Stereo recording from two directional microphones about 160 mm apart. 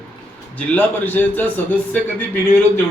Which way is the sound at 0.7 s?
10° left (ahead or behind).